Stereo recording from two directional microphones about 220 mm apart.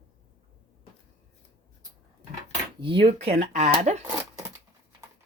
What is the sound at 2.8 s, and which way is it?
Speech, 25° right (ahead or behind).